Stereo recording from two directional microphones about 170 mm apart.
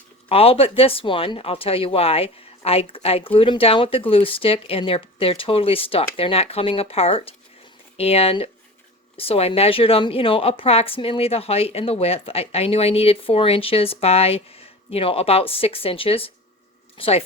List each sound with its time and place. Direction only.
0.3 s speech: 35° left (ahead or behind)